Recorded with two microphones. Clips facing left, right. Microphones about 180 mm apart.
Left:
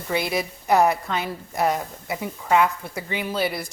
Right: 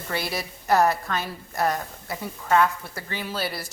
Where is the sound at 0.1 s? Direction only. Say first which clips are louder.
Left 5 dB; 20° left (ahead or behind).